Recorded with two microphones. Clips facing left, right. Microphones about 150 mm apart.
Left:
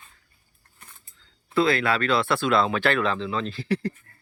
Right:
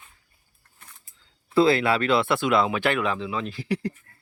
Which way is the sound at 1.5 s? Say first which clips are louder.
Right 3 dB; 25° right (ahead or behind).